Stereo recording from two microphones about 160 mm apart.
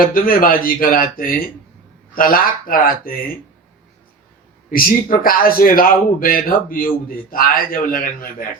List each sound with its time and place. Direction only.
0.0 s a man's voice: 65° left (ahead or behind)
4.7 s a man's voice: 65° left (ahead or behind)